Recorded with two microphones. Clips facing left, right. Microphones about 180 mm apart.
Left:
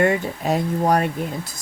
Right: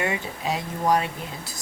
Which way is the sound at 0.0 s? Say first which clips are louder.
Left 8 dB; 50° left (ahead or behind).